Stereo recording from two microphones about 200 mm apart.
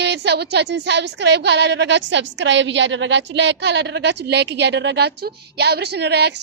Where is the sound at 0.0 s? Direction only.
55° right (ahead or behind).